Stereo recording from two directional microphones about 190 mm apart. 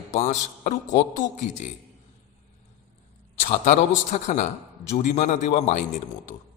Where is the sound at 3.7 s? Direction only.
40° left (ahead or behind).